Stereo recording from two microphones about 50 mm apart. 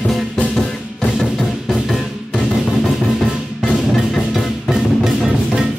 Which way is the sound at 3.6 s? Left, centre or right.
Centre.